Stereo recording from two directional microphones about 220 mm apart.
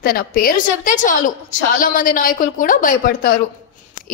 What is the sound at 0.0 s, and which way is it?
A woman's voice, 40° left (ahead or behind).